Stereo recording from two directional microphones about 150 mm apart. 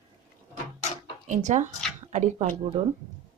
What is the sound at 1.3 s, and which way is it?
A woman's voice, 50° right (ahead or behind).